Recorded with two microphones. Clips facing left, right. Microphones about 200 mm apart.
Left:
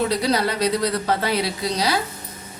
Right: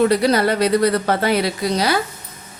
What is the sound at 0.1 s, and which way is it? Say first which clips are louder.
A woman's voice: right 5 dB; 55° right (ahead or behind).